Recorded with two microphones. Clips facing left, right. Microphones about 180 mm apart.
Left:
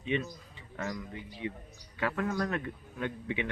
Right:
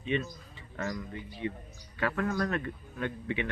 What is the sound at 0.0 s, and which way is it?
A man's voice, 15° left (ahead or behind).